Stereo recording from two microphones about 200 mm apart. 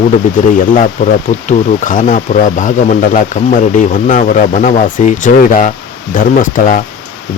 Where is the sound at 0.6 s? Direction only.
40° left (ahead or behind).